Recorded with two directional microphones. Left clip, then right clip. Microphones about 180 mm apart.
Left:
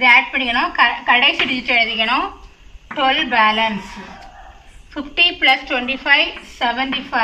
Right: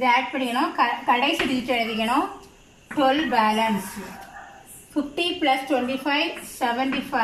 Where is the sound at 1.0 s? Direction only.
25° right (ahead or behind).